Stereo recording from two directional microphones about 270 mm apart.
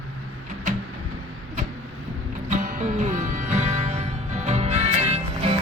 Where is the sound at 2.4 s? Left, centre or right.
Right.